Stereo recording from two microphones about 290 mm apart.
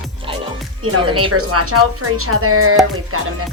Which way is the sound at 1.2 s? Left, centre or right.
Right.